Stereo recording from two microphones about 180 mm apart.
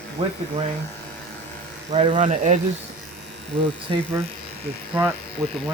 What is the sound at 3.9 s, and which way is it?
Speech, 30° right (ahead or behind).